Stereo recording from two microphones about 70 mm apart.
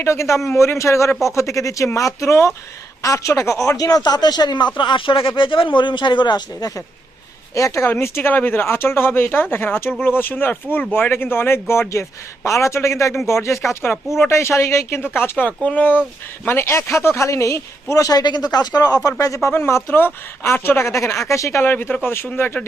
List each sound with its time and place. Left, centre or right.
0.0 s speech: left
7.5 s speech: left
7.9 s speech: left
16.5 s speech: left
19.5 s speech: left
21.6 s speech: left